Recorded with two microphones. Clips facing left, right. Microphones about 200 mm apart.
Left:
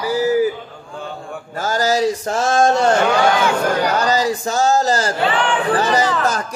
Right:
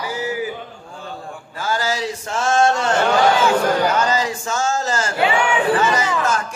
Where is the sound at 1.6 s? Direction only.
40° left (ahead or behind).